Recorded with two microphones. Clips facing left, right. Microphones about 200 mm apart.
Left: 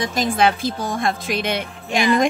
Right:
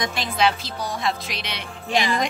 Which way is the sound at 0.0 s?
45° left (ahead or behind).